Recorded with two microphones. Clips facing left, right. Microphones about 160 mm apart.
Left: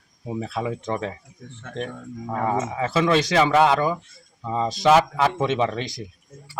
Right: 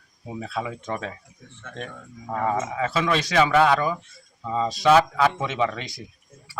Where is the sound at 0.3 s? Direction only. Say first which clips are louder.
Left 3 dB; 25° left (ahead or behind).